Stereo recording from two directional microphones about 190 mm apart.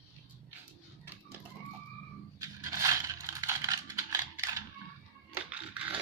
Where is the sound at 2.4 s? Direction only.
20° right (ahead or behind).